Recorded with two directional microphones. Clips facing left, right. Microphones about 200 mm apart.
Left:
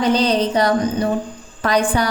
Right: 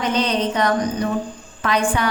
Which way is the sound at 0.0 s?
35° left (ahead or behind).